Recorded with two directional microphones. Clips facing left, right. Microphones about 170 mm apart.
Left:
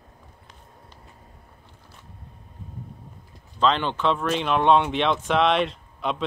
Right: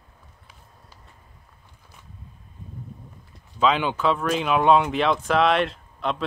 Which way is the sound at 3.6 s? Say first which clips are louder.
Right 1 dB; 10° right (ahead or behind).